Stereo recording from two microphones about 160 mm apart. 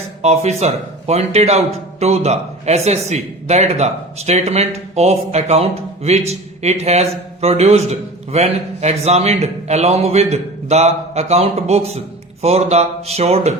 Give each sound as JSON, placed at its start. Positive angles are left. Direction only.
{"t": 0.2, "sound": "speech", "side_deg": -40}